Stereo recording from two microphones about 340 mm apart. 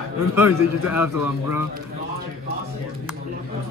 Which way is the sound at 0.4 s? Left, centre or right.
Left.